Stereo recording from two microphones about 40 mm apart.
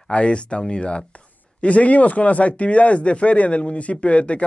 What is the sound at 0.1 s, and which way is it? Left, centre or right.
Speech, left.